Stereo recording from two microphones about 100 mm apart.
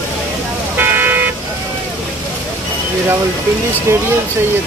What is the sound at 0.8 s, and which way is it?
Vehicle, 20° right (ahead or behind).